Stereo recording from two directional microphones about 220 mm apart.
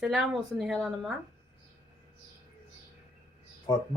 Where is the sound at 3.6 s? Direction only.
20° left (ahead or behind).